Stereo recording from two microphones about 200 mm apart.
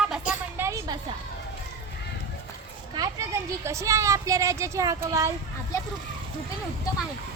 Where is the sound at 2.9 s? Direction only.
15° right (ahead or behind).